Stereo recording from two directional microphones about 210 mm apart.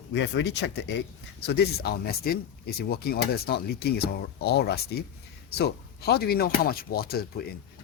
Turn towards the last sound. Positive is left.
turn(degrees=45)  # may be behind; listen again after turning